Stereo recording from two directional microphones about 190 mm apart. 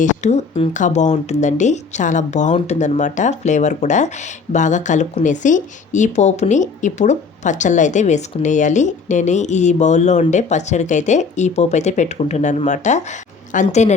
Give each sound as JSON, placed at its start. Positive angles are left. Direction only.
{"t": 0.0, "sound": "speech", "side_deg": 40}